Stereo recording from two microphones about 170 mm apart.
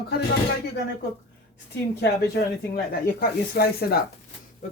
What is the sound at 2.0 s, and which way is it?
Speech, 75° left (ahead or behind).